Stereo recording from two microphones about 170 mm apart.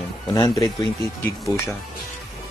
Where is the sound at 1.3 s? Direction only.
15° left (ahead or behind).